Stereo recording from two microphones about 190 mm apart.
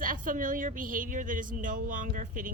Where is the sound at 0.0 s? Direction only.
45° right (ahead or behind).